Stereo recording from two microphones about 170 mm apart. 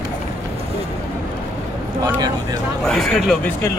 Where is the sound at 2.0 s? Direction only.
20° right (ahead or behind).